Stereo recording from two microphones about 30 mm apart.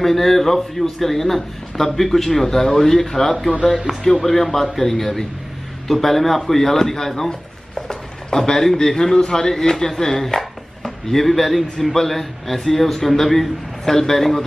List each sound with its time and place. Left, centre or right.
0.0 s speech: centre
7.2 s a sound: left
8.7 s speech: centre